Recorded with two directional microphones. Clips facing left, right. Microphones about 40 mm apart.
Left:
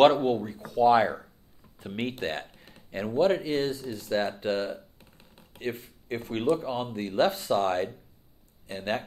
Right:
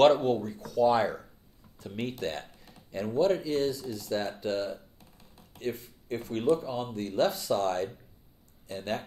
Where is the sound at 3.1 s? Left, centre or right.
Left.